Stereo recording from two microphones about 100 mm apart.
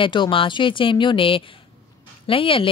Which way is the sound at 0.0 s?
55° left (ahead or behind).